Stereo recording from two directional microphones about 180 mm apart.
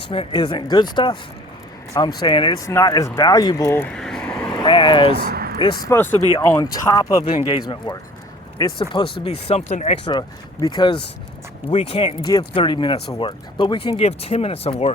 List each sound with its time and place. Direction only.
0.1 s speech: 30° left (ahead or behind); by 4.6 s 5° left (ahead or behind)
4.6 s speech: 25° left (ahead or behind)
5.1 s a sound: 60° right (ahead or behind)
5.5 s speech: 25° left (ahead or behind)
10.1 s speech: 25° left (ahead or behind)
11.7 s speech: 35° left (ahead or behind)